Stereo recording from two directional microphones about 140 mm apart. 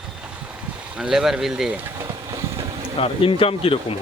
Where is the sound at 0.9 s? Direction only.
5° right (ahead or behind).